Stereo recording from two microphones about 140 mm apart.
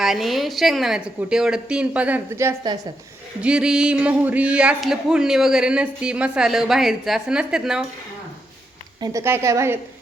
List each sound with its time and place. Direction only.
0.0 s a man's voice: centre (ahead or behind); by 2.7 s 20° right (ahead or behind)
3.4 s a man's voice: 5° right (ahead or behind)
9.0 s a woman's voice: 20° right (ahead or behind)